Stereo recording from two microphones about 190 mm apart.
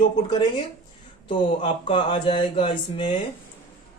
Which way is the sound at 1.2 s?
25° left (ahead or behind).